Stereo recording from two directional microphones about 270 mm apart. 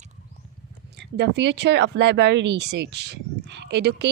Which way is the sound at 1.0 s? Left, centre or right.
Right.